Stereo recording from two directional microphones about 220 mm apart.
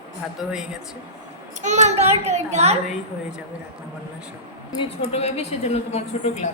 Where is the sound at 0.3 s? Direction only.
Centre (ahead or behind).